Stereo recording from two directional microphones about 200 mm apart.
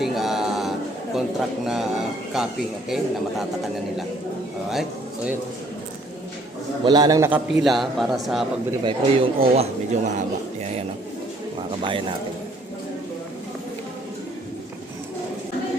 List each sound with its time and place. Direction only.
0.0 s a sound: centre (ahead or behind)
1.1 s a man's voice: centre (ahead or behind)
6.8 s a man's voice: 20° right (ahead or behind); by 8.4 s centre (ahead or behind)
8.8 s speech: 25° right (ahead or behind)
11.7 s speech: 25° right (ahead or behind)